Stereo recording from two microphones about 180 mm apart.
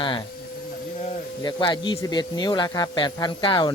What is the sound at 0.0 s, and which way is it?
Speech, 25° left (ahead or behind).